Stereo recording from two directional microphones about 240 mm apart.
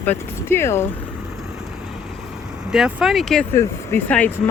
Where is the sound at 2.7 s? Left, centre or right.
Centre.